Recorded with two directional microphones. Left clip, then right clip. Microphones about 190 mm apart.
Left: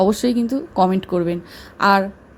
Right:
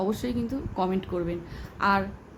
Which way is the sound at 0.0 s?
40° left (ahead or behind).